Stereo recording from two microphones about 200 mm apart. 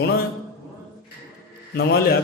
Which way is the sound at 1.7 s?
50° left (ahead or behind).